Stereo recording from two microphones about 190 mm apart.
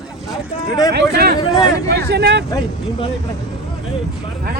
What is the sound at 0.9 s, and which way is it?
Speech, 60° right (ahead or behind).